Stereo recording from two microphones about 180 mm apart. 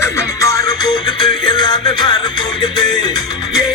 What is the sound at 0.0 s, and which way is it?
Music, 15° left (ahead or behind).